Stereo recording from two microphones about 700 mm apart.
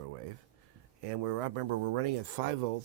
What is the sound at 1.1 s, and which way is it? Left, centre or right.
Speech, right.